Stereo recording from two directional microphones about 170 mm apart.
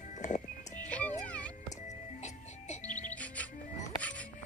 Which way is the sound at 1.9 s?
45° left (ahead or behind).